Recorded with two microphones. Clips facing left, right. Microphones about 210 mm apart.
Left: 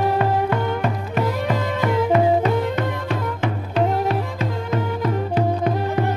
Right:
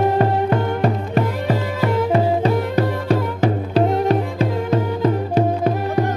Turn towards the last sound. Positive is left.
turn(degrees=-35)  # may be behind; listen again after turning